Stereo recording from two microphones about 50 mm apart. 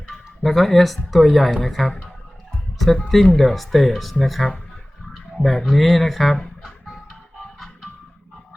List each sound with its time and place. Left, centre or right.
0.1 s speech: centre